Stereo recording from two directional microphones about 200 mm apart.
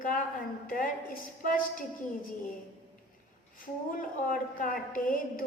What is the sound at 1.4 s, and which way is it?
Speech, 45° left (ahead or behind).